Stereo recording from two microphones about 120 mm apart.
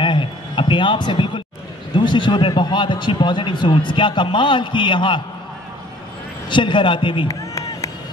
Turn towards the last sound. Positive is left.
turn(degrees=30)  # may be behind; listen again after turning